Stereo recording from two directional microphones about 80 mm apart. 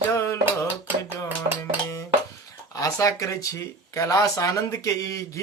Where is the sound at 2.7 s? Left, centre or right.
Left.